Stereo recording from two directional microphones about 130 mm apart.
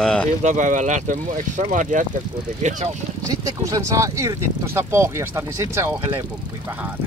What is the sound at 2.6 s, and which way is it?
Speech, 65° right (ahead or behind).